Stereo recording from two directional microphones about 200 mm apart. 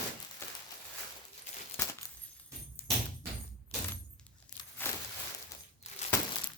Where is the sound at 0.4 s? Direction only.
10° left (ahead or behind).